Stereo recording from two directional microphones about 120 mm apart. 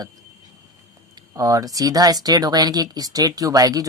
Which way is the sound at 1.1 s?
30° right (ahead or behind).